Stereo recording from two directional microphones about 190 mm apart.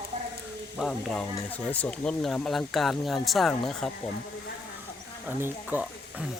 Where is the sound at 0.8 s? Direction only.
5° left (ahead or behind).